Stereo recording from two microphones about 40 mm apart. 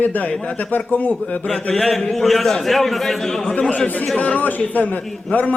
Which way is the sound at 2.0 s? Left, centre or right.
Centre.